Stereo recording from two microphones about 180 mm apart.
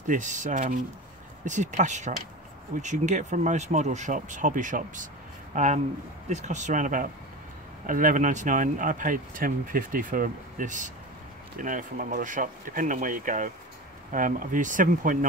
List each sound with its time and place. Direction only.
0.0 s speech: 45° right (ahead or behind)